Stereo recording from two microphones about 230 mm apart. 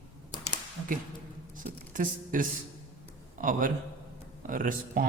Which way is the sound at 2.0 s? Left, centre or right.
Right.